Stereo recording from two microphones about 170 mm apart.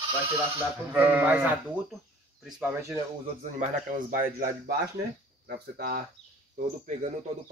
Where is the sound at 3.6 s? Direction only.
50° right (ahead or behind).